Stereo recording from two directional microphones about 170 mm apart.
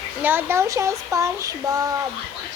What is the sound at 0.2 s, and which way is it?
Speech, 10° right (ahead or behind).